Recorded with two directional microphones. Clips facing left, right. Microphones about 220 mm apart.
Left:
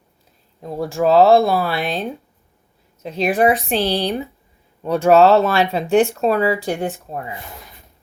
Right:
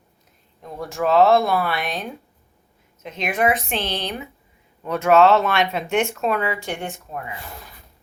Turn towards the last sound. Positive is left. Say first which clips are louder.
# left 5 dB
turn(degrees=30)  # may be behind; listen again after turning